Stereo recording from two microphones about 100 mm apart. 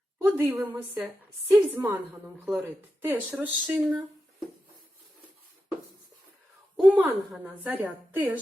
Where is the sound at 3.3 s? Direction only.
10° right (ahead or behind).